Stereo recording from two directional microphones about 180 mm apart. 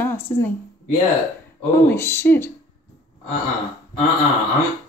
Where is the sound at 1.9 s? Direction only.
15° left (ahead or behind).